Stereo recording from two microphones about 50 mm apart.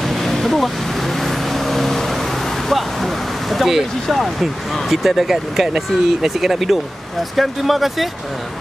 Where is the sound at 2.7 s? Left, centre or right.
Centre.